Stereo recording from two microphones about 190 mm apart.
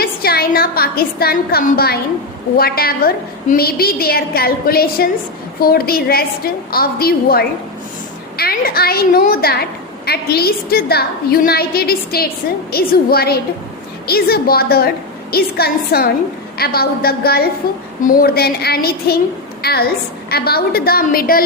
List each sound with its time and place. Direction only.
0.0 s a woman's voice: 55° left (ahead or behind)